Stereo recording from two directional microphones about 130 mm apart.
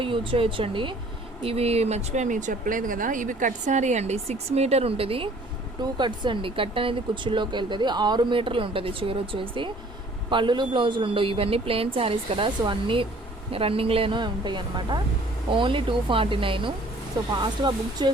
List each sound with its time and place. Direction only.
0.0 s speech: 40° right (ahead or behind)
5.8 s a woman's voice: 35° right (ahead or behind)